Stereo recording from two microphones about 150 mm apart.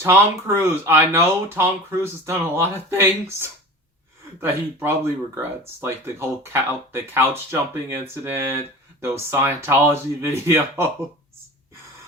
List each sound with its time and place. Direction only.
0.0 s speech: 20° right (ahead or behind)
4.4 s speech: 15° right (ahead or behind)